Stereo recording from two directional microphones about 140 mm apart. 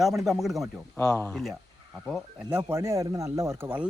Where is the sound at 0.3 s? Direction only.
Centre (ahead or behind).